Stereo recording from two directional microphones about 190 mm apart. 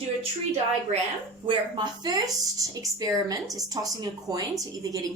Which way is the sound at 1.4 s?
25° right (ahead or behind).